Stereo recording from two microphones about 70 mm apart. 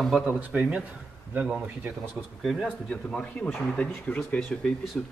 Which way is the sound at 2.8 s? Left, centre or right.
Centre.